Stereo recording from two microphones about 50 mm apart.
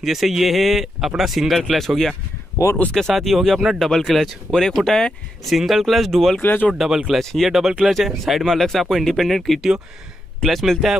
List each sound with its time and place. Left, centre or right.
0.0 s speech: centre
2.6 s speech: left
2.9 s speech: centre
5.4 s speech: centre
6.4 s speech: left
6.7 s speech: centre
7.1 s speech: centre